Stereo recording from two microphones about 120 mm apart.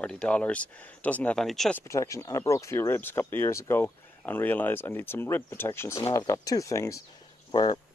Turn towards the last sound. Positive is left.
turn(degrees=40)  # may be behind; listen again after turning